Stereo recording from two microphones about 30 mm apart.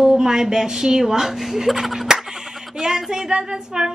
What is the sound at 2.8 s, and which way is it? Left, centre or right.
A woman's voice, centre.